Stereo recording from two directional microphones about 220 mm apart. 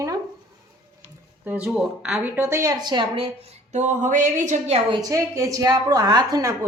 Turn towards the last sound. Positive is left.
turn(degrees=-15)  # may be behind; listen again after turning